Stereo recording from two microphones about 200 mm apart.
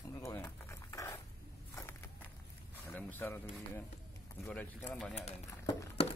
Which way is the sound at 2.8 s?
10° left (ahead or behind).